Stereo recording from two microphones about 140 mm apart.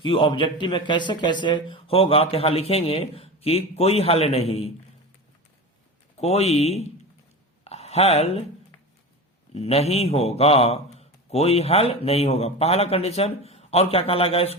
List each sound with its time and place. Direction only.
0.0 s a man's voice: 35° left (ahead or behind)
6.1 s a man's voice: 50° left (ahead or behind)
9.6 s a man's voice: 50° left (ahead or behind)